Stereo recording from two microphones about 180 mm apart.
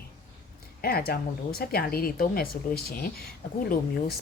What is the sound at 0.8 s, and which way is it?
A woman's voice, 60° left (ahead or behind).